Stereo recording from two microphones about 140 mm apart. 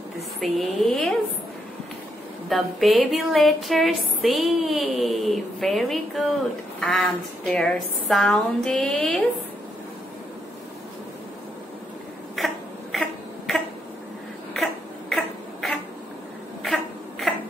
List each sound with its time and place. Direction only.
0.4 s a woman's voice: centre (ahead or behind)
2.5 s a woman's voice: centre (ahead or behind)
12.4 s a sound: centre (ahead or behind)